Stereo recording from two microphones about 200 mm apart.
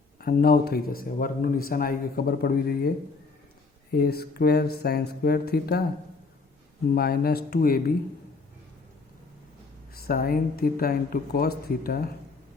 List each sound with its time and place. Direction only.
0.2 s speech: 50° left (ahead or behind)
3.9 s speech: 50° left (ahead or behind)
6.9 s speech: 50° left (ahead or behind)
9.9 s speech: 50° left (ahead or behind)